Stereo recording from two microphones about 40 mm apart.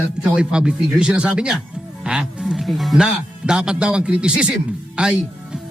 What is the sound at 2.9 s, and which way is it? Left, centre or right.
Speech, centre.